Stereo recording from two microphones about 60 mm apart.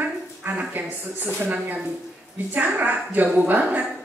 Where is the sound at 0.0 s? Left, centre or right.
Right.